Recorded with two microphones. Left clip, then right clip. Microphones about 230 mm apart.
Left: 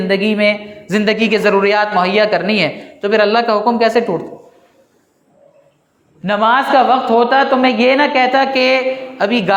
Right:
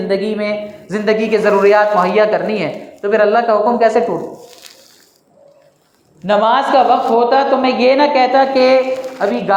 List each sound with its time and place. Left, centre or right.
0.1 s speech: left
6.2 s speech: left